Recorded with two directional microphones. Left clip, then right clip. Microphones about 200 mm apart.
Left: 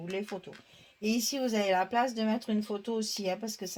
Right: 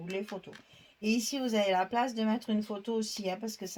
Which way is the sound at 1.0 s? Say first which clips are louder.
Left 1 dB; 40° left (ahead or behind).